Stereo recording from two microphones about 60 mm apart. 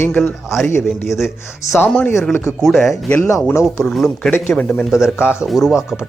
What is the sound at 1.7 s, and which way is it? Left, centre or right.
Speech, left.